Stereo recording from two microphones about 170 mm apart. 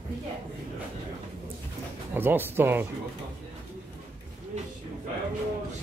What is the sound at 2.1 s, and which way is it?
Speech, 10° right (ahead or behind).